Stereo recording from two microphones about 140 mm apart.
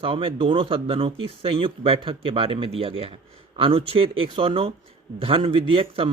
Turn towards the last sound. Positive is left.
turn(degrees=-40)  # may be behind; listen again after turning